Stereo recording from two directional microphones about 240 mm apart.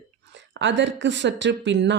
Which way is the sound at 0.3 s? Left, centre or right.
Right.